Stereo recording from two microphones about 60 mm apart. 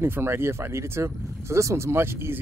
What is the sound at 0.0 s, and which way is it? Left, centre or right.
Speech, right.